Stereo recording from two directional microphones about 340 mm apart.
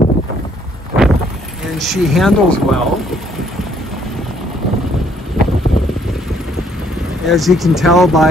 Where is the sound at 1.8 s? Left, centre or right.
Centre.